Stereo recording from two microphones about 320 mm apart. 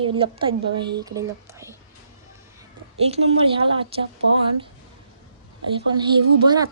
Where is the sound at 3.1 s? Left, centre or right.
Centre.